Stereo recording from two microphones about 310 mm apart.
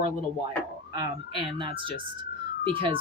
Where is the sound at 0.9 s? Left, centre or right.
Centre.